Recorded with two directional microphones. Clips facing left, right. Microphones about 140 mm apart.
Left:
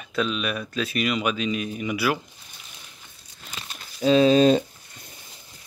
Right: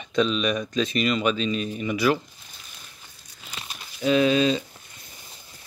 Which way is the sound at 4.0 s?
30° left (ahead or behind).